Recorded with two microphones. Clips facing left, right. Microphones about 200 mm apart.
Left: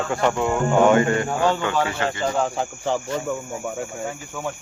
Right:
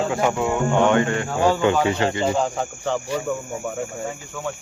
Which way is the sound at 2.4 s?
10° left (ahead or behind).